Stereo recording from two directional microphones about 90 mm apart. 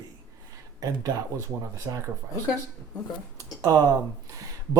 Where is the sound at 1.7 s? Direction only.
35° right (ahead or behind).